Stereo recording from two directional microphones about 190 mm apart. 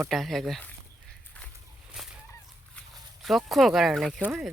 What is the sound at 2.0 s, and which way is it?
Fowl, centre (ahead or behind).